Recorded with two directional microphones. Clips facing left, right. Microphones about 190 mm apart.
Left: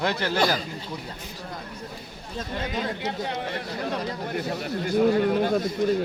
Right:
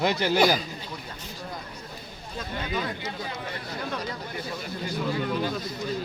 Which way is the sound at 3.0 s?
70° left (ahead or behind).